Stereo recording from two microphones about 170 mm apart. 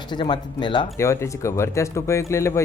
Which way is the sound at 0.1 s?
25° left (ahead or behind).